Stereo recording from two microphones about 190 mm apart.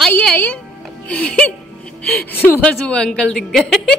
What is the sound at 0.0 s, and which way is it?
Music, 5° left (ahead or behind).